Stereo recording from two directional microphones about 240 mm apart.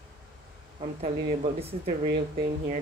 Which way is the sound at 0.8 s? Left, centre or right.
Right.